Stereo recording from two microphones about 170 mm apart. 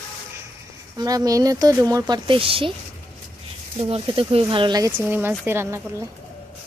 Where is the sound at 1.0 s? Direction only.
20° right (ahead or behind).